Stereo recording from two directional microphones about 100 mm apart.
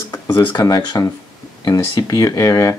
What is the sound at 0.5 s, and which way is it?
Speech, 40° left (ahead or behind).